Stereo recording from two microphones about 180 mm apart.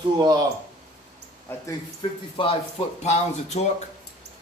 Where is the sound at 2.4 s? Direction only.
30° left (ahead or behind).